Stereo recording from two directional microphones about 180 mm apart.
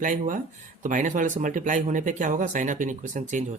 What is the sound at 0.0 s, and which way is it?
Speech, 45° right (ahead or behind).